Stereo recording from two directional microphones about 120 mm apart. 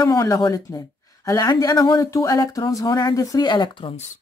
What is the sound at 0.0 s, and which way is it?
A woman's voice, 30° left (ahead or behind).